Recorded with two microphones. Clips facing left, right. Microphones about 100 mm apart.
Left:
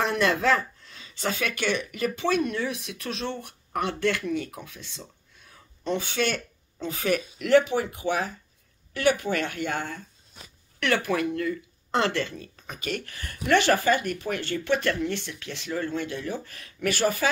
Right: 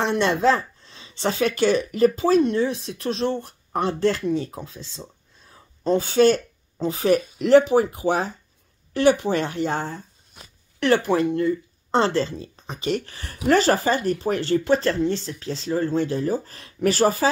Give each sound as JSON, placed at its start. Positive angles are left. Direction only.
{"t": 0.0, "sound": "speech", "side_deg": -25}